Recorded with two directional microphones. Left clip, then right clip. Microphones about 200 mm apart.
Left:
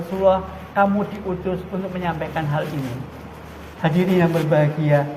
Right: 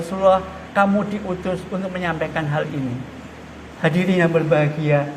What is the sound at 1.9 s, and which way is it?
Speech, 55° right (ahead or behind).